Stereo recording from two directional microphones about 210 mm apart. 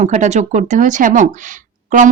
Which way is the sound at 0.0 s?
35° right (ahead or behind).